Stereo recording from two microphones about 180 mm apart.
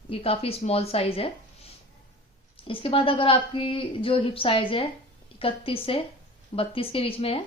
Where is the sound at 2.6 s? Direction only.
30° left (ahead or behind).